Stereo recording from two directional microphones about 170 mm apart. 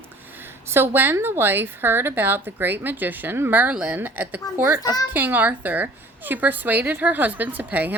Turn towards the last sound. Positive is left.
turn(degrees=-10)  # may be behind; listen again after turning